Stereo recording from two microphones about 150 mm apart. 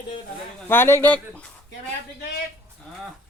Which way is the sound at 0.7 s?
15° left (ahead or behind).